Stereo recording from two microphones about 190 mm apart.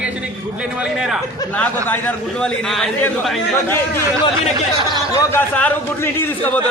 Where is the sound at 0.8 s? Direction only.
5° right (ahead or behind).